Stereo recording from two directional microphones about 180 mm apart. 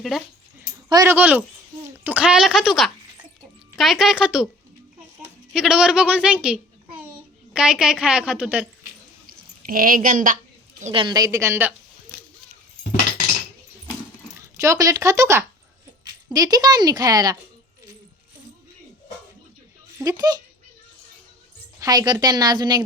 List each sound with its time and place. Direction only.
0.9 s speech: 20° right (ahead or behind)
1.1 s a woman's voice: 10° right (ahead or behind)
5.5 s a woman's voice: 5° right (ahead or behind)
9.2 s a sound: 50° right (ahead or behind)
10.9 s a woman's voice: 25° right (ahead or behind)
14.5 s speech: 15° right (ahead or behind)
20.0 s speech: 20° right (ahead or behind)
21.8 s speech: 20° right (ahead or behind)